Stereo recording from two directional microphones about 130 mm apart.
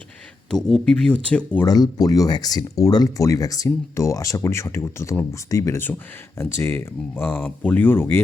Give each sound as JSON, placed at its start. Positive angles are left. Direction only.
{"t": 0.5, "sound": "speech", "side_deg": 5}
{"t": 1.6, "sound": "speech", "side_deg": 30}